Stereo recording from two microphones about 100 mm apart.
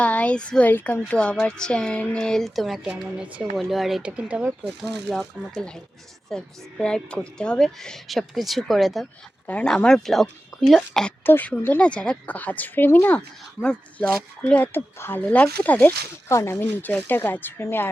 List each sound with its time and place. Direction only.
0.0 s a woman's voice: 15° left (ahead or behind)
11.2 s a woman's voice: 20° left (ahead or behind)
16.3 s speech: 25° left (ahead or behind)